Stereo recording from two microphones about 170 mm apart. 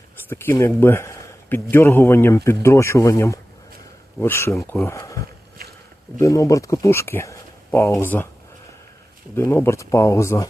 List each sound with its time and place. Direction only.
0.3 s speech: 15° left (ahead or behind)
0.8 s a sound: 15° left (ahead or behind)
1.7 s speech: 15° left (ahead or behind)
9.3 s speech: 15° left (ahead or behind)